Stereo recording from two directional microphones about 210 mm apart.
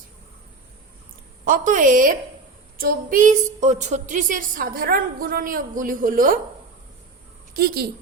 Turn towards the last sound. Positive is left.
turn(degrees=-50)  # may be behind; listen again after turning